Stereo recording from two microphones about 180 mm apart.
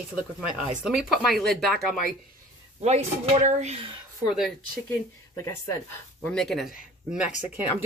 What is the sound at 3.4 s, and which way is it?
Speech, 40° right (ahead or behind).